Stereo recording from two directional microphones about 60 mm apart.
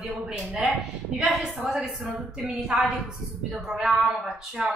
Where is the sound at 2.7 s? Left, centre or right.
Right.